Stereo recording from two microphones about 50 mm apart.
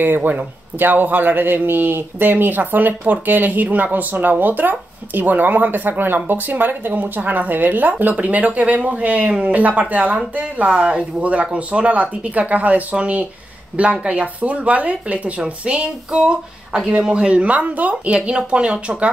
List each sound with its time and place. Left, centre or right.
0.0 s speech: right